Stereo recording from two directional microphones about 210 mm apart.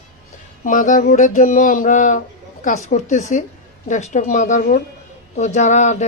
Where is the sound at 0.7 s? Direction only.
40° left (ahead or behind).